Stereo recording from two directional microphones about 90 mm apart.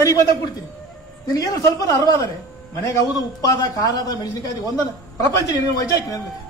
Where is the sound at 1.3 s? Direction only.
40° left (ahead or behind).